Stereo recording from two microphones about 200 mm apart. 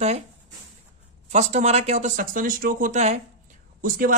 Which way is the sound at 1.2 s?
35° right (ahead or behind).